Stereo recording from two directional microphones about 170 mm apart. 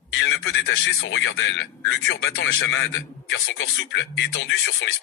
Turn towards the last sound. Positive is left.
turn(degrees=90)